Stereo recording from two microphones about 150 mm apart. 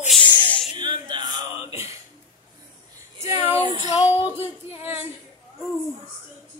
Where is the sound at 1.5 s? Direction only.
40° left (ahead or behind).